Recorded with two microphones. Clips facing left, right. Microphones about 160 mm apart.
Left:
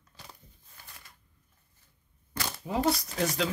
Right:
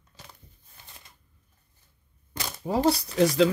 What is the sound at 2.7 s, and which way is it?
Speech, 30° right (ahead or behind).